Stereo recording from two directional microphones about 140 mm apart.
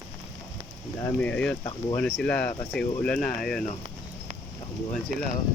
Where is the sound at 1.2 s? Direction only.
10° left (ahead or behind).